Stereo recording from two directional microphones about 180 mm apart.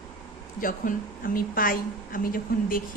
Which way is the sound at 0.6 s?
50° left (ahead or behind).